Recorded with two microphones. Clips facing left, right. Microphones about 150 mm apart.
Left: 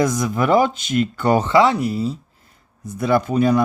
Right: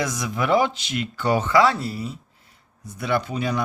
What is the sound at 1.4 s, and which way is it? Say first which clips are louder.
Speech: left 3 dB; 20° left (ahead or behind).